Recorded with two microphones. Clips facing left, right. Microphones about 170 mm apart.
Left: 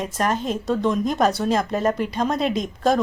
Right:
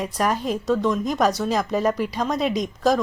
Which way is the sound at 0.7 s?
25° left (ahead or behind).